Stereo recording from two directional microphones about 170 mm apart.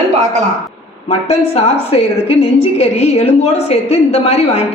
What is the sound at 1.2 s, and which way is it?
A woman's voice, 40° left (ahead or behind).